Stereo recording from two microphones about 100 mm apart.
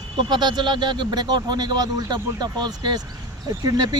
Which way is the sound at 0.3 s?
45° right (ahead or behind).